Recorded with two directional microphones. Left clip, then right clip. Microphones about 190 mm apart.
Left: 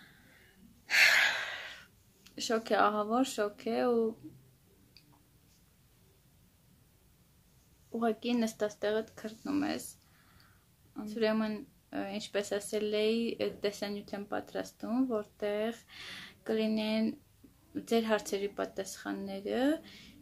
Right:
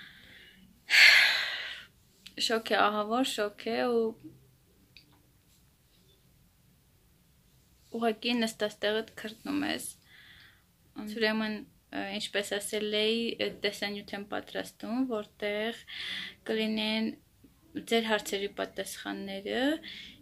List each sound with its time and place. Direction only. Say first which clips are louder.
0.8 s a sound: right 5 dB; 5° left (ahead or behind)
7.9 s speech: right 2 dB; centre (ahead or behind)
10.9 s speech: right 2 dB; centre (ahead or behind)